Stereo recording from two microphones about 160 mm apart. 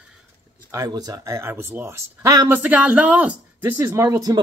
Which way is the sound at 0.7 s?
20° right (ahead or behind).